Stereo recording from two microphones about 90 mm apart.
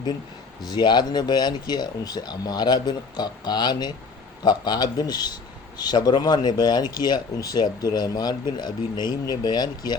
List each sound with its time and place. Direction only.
0.7 s a man's voice: 55° left (ahead or behind)